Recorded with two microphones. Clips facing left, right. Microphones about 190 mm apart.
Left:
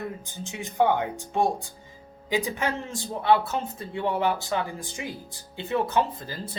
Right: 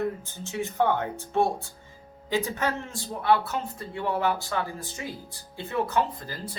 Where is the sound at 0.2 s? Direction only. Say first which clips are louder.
Right 4 dB; 15° left (ahead or behind).